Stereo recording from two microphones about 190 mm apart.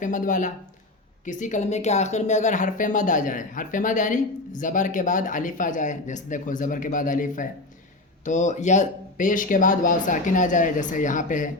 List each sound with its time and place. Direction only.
0.0 s speech: 45° left (ahead or behind)